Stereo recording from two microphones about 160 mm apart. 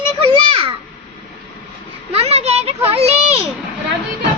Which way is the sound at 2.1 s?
40° right (ahead or behind).